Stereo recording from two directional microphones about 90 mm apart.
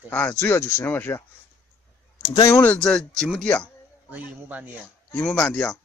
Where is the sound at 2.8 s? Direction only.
5° left (ahead or behind).